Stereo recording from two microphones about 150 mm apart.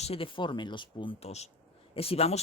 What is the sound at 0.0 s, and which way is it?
Speech, 40° left (ahead or behind).